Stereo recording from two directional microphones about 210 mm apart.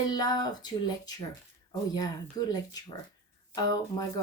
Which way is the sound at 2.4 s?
15° left (ahead or behind).